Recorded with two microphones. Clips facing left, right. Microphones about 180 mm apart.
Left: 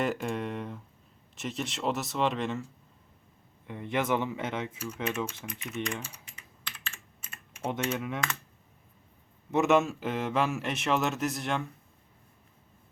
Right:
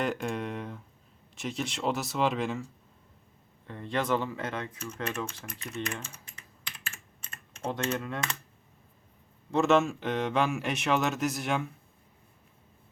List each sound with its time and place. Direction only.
0.0 s speech: centre (ahead or behind)
3.7 s speech: 15° left (ahead or behind)
5.0 s speech: centre (ahead or behind)
6.7 s computer keyboard: 10° right (ahead or behind)
7.3 s typing: 10° left (ahead or behind)
7.7 s speech: 10° left (ahead or behind)
9.5 s speech: 15° left (ahead or behind)
9.8 s speech: 5° left (ahead or behind)